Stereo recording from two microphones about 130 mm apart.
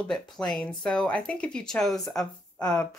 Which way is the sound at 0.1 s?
5° left (ahead or behind).